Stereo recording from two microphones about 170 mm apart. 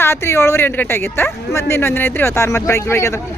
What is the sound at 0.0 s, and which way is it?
Speech, 15° left (ahead or behind).